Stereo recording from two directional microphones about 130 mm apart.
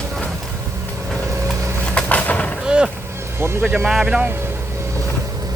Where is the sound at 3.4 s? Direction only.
15° right (ahead or behind).